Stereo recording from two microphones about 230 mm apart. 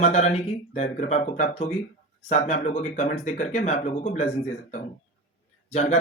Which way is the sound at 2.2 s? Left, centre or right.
Left.